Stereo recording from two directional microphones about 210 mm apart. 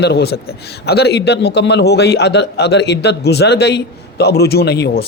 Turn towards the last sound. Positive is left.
turn(degrees=50)  # may be behind; listen again after turning